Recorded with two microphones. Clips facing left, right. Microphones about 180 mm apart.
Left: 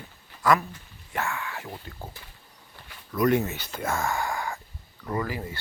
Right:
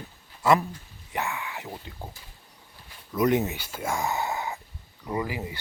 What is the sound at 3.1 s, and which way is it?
Speech, 20° right (ahead or behind).